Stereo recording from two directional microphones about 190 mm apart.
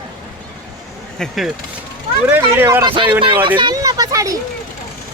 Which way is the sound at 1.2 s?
Centre (ahead or behind).